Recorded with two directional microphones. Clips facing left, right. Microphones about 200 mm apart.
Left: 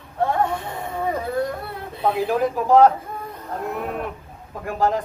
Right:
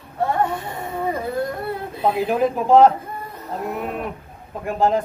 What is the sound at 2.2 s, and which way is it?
Speech, 20° right (ahead or behind).